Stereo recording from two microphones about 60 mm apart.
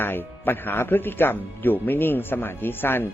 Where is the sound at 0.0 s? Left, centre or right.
Left.